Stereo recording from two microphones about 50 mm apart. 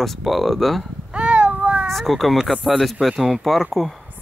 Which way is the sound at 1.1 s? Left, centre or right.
Right.